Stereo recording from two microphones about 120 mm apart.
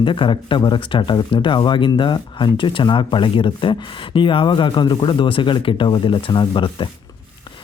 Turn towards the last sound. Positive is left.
turn(degrees=40)  # may be behind; listen again after turning